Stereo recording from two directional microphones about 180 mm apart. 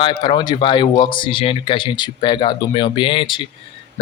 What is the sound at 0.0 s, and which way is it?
Speech, 25° left (ahead or behind).